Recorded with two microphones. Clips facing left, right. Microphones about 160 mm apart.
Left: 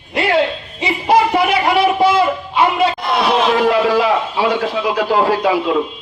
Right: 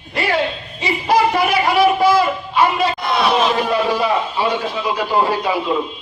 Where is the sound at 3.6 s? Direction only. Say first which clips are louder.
Left 4 dB; 90° left.